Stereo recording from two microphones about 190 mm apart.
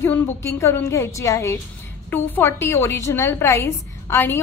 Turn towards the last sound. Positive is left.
turn(degrees=10)  # may be behind; listen again after turning